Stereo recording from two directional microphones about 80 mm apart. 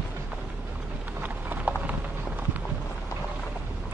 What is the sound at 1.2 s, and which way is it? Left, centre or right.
Clip-clop, right.